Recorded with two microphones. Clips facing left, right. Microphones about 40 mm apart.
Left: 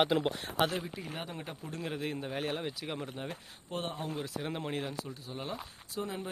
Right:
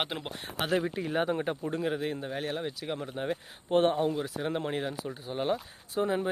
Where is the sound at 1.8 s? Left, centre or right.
Centre.